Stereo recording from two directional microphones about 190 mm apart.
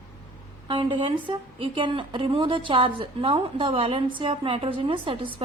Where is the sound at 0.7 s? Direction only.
25° right (ahead or behind).